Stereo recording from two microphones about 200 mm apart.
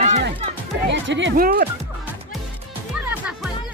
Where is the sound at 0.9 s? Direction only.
65° right (ahead or behind).